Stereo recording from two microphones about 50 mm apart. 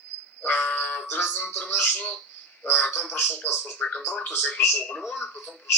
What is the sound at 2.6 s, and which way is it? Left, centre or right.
Speech, left.